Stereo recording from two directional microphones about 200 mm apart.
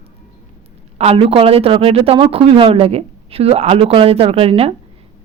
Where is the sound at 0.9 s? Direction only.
30° right (ahead or behind).